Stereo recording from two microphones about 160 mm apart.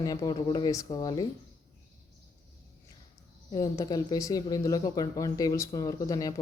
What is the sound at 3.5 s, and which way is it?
Speech, 25° left (ahead or behind).